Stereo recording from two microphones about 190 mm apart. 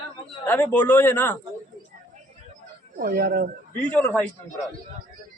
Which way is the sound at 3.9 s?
10° left (ahead or behind).